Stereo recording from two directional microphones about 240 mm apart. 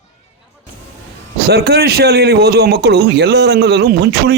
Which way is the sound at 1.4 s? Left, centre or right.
Right.